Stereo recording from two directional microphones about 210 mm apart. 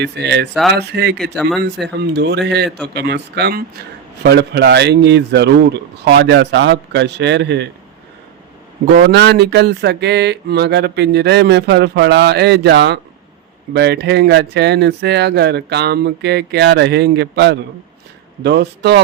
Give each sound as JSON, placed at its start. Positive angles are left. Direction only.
{"t": 0.0, "sound": "speech", "side_deg": -55}
{"t": 1.2, "sound": "speech", "side_deg": 0}
{"t": 1.6, "sound": "speech", "side_deg": -55}
{"t": 9.0, "sound": "speech", "side_deg": -55}